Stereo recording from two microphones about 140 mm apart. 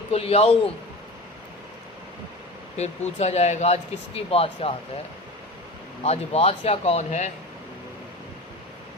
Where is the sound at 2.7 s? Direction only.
50° left (ahead or behind).